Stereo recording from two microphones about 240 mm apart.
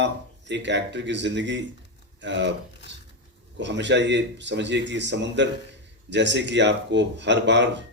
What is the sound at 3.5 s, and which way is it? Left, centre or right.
Speech, right.